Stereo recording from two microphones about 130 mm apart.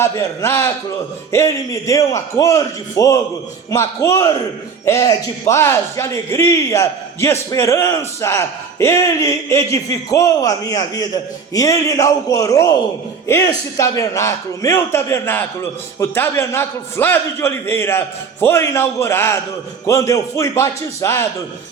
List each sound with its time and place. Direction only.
0.0 s a man's voice: 20° left (ahead or behind)